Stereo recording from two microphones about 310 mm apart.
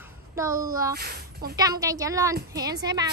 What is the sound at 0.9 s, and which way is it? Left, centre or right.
Speech, right.